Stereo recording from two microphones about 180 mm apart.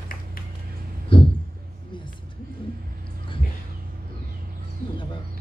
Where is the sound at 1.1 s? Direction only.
30° left (ahead or behind).